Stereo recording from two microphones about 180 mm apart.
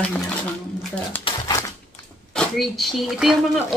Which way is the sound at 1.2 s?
20° left (ahead or behind).